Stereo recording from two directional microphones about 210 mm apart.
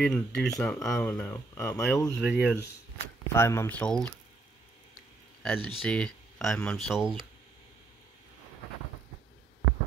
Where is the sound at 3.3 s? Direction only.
10° left (ahead or behind).